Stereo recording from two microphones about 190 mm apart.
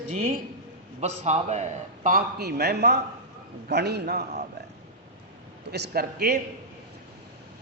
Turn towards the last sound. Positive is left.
turn(degrees=-55)  # may be behind; listen again after turning